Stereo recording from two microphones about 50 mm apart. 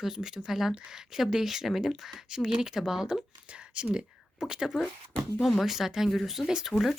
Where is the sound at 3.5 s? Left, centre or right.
Right; by 7.0 s centre.